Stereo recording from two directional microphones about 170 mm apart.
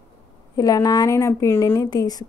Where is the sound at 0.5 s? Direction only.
20° left (ahead or behind).